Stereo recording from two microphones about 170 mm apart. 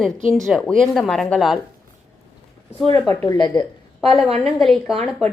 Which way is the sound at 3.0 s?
15° left (ahead or behind).